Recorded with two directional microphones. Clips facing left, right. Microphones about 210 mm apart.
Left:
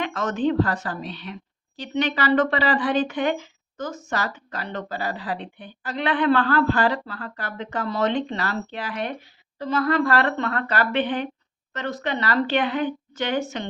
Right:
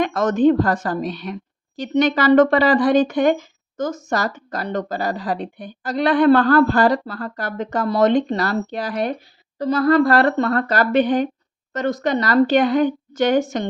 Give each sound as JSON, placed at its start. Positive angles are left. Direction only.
{"t": 0.0, "sound": "a woman's voice", "side_deg": -45}